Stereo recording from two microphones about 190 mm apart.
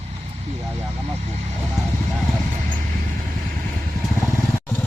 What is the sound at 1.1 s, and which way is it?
Speech, 35° right (ahead or behind).